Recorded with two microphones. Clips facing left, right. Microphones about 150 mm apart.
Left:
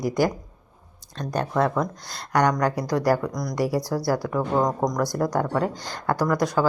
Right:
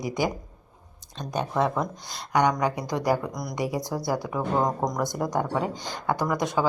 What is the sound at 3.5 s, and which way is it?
Speech, 15° right (ahead or behind).